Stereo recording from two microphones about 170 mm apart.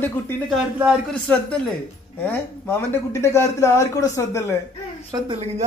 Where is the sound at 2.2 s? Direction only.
15° left (ahead or behind).